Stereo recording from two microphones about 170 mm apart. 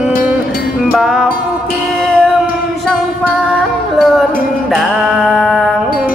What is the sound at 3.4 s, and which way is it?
Music, 5° right (ahead or behind).